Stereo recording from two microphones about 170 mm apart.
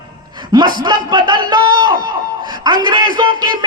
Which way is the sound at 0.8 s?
25° right (ahead or behind).